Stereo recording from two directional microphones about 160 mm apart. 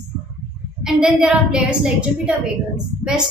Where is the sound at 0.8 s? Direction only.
5° right (ahead or behind).